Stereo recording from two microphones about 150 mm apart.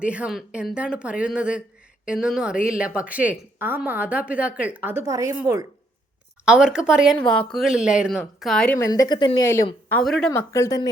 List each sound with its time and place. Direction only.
0.0 s a woman's voice: 10° right (ahead or behind)
6.4 s speech: 5° right (ahead or behind)
8.8 s speech: 25° left (ahead or behind)
9.4 s speech: 20° left (ahead or behind)
9.9 s speech: 5° left (ahead or behind)
10.3 s speech: 20° left (ahead or behind)